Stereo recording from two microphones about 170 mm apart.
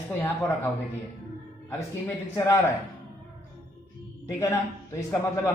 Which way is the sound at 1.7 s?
15° left (ahead or behind).